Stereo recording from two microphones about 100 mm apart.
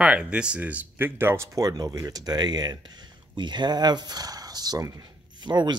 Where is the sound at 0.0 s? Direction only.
10° right (ahead or behind).